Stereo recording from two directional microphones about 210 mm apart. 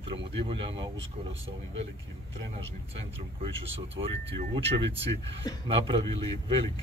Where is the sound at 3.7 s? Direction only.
30° right (ahead or behind).